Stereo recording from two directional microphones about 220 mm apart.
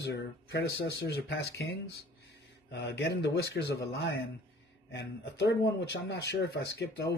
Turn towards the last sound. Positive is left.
turn(degrees=50)  # may be behind; listen again after turning